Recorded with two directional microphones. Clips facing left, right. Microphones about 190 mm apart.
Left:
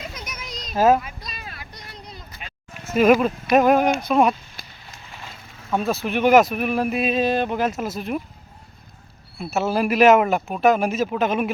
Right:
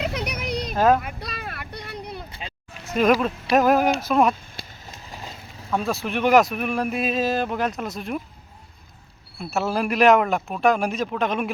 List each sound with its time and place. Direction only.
0.0 s a sound: 65° right (ahead or behind)
1.0 s vehicle: 60° right (ahead or behind)
2.8 s speech: 5° left (ahead or behind)
5.0 s a sound: 40° right (ahead or behind)
5.7 s speech: centre (ahead or behind)
9.4 s speech: centre (ahead or behind)